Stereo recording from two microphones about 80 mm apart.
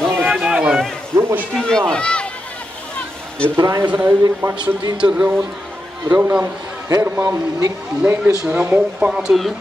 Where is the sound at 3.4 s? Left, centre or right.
Right.